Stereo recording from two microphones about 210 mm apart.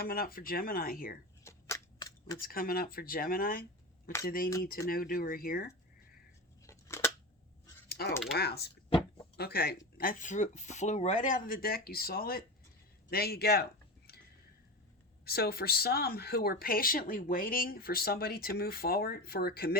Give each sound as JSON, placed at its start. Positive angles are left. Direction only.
{"t": 0.0, "sound": "speech", "side_deg": 45}
{"t": 1.5, "sound": "a sound", "side_deg": 15}
{"t": 2.4, "sound": "speech", "side_deg": 45}
{"t": 6.7, "sound": "scissors", "side_deg": 15}
{"t": 7.9, "sound": "typing", "side_deg": 45}
{"t": 8.4, "sound": "speech", "side_deg": 50}
{"t": 15.2, "sound": "speech", "side_deg": 45}